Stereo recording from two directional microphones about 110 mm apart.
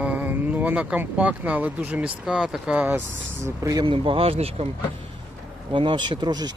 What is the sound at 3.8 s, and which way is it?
Speech, 50° right (ahead or behind).